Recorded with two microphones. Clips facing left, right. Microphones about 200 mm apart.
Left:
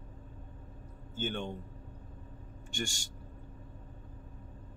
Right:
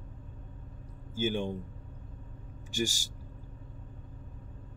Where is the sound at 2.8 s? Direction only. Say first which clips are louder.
Right 6 dB; 5° right (ahead or behind).